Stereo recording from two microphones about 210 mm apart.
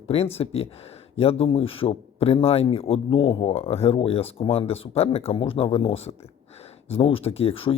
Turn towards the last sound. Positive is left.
turn(degrees=25)  # may be behind; listen again after turning